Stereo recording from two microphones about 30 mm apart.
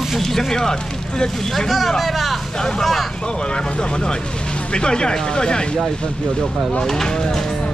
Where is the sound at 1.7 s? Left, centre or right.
Centre.